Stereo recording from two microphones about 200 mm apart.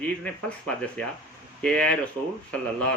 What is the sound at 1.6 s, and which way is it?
Speech, 5° left (ahead or behind).